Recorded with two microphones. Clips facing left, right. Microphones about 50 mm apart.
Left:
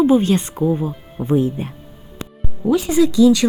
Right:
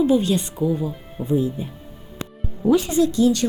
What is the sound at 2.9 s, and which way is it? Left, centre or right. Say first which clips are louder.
Speech: left 5 dB; left.